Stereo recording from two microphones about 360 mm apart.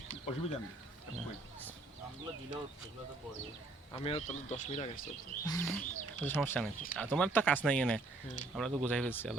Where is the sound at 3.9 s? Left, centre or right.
Centre.